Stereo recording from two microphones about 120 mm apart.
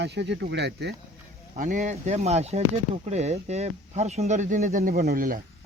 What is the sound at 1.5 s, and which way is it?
Speech, 90° right.